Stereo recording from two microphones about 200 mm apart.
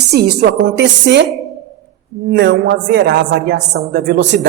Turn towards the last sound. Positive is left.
turn(degrees=-60)  # may be behind; listen again after turning